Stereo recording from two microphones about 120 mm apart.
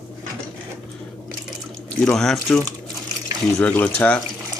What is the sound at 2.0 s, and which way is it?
Speech, 5° left (ahead or behind).